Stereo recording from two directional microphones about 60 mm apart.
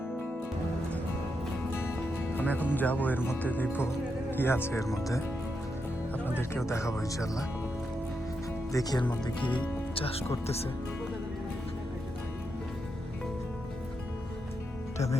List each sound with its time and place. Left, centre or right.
1.8 s music: left
2.4 s speech: left
4.8 s speech: left
6.5 s speech: left
8.7 s speech: left